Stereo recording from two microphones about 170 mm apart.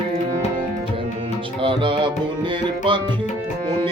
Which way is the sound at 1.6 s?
30° right (ahead or behind).